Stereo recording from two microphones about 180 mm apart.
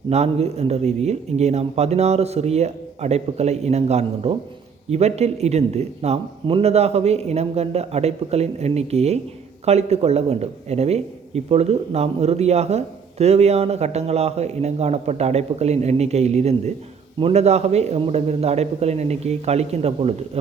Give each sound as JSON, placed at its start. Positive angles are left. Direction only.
{"t": 0.1, "sound": "speech", "side_deg": -35}